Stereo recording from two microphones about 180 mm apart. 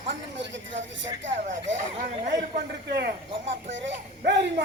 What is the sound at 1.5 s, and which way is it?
Speech, 40° right (ahead or behind).